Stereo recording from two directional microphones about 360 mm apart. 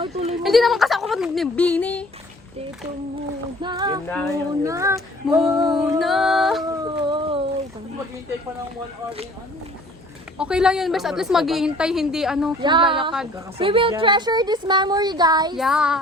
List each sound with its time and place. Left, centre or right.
0.0 s a sound: centre
0.4 s speech: centre
3.6 s a woman's voice: centre
4.6 s female singing: centre
6.8 s a sound: centre
10.3 s a woman's voice: centre
12.6 s a woman's voice: centre